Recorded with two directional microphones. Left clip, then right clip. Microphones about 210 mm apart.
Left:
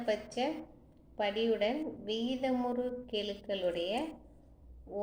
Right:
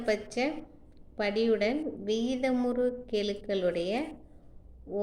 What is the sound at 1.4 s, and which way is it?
A woman's voice, 45° right (ahead or behind).